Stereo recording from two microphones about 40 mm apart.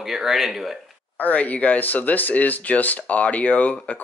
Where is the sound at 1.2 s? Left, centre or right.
Left.